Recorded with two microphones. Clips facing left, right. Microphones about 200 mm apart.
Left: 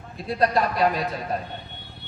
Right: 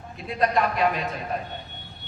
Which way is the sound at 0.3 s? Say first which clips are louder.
Left 1 dB; 35° left (ahead or behind).